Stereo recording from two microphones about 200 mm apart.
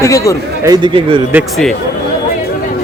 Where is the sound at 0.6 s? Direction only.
20° right (ahead or behind).